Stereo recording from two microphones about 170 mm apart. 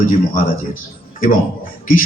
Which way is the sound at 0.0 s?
50° left (ahead or behind).